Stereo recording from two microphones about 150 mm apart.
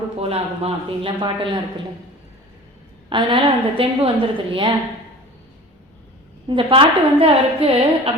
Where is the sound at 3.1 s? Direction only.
35° right (ahead or behind).